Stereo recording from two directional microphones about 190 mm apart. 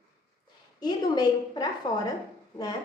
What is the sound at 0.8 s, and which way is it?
A woman's voice, 20° left (ahead or behind).